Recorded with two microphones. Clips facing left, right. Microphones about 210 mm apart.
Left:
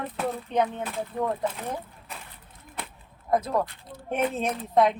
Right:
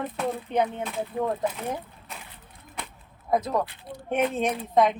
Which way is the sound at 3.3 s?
Centre (ahead or behind).